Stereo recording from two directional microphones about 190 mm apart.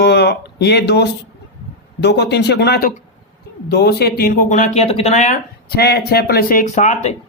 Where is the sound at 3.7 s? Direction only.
60° left (ahead or behind); by 5.4 s 40° left (ahead or behind).